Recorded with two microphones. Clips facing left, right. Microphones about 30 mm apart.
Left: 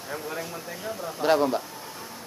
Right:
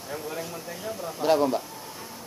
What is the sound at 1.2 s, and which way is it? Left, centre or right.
Speech, centre.